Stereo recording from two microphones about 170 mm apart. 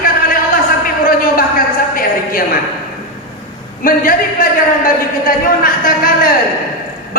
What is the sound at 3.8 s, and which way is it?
A man's voice, 55° left (ahead or behind).